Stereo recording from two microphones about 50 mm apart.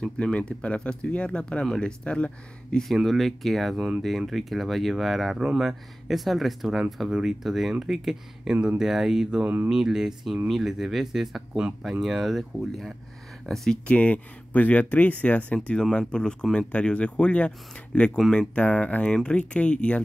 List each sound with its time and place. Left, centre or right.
0.0 s speech: left
2.8 s speech: centre
13.8 s speech: left